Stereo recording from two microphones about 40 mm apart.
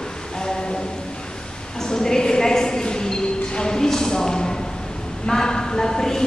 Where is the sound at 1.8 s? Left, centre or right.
Centre.